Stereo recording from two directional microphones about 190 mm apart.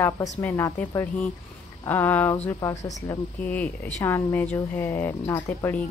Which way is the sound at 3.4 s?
10° left (ahead or behind).